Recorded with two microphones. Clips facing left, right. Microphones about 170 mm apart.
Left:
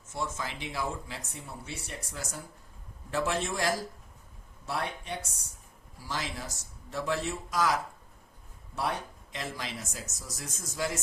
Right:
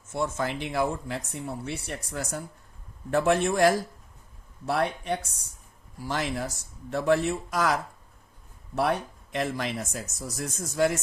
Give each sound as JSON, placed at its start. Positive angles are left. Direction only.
{"t": 0.1, "sound": "speech", "side_deg": -60}
{"t": 9.3, "sound": "speech", "side_deg": -60}